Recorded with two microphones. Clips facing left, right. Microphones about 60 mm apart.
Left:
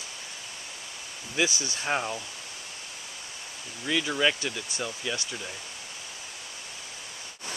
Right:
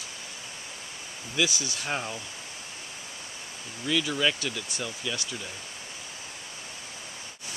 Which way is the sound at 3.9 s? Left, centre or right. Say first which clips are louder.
Left 1 dB; centre.